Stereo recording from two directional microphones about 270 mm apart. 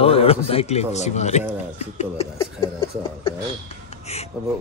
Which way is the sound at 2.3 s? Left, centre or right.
Centre.